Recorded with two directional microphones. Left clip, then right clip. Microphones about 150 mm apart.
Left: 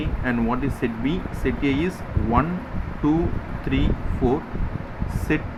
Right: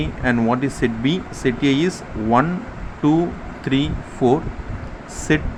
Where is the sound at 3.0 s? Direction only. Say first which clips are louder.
Right 4 dB; 45° right (ahead or behind).